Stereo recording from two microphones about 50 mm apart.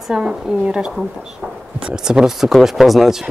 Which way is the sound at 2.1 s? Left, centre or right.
Centre.